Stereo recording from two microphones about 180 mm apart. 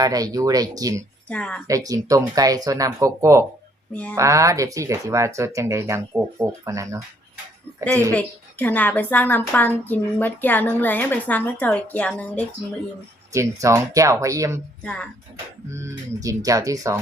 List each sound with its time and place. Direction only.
0.0 s speech: 20° right (ahead or behind)
1.3 s a woman's voice: 5° left (ahead or behind)
1.6 s speech: 20° right (ahead or behind)
8.1 s a woman's voice: 10° left (ahead or behind)
13.3 s speech: 15° right (ahead or behind)
15.7 s speech: 15° right (ahead or behind)